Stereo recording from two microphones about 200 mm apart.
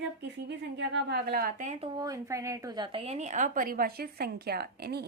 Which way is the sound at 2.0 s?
15° right (ahead or behind).